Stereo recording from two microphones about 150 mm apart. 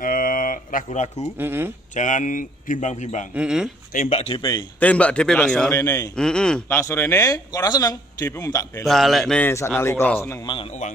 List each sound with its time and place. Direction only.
0.0 s a sound: 70° left (ahead or behind); by 1.2 s 50° left (ahead or behind)
1.4 s speech: 15° right (ahead or behind)
2.0 s speech: 55° left (ahead or behind)
3.3 s speech: 5° right (ahead or behind)
4.1 s speech: 45° left (ahead or behind)
4.4 s a man's voice: 25° left (ahead or behind)
4.7 s a man's voice: 10° left (ahead or behind)
5.7 s a man's voice: 20° left (ahead or behind)
6.1 s speech: 5° left (ahead or behind)
6.7 s a man's voice: 15° left (ahead or behind)
8.8 s speech: centre (ahead or behind)
9.5 s a man's voice: 15° left (ahead or behind)
10.4 s a man's voice: 35° left (ahead or behind)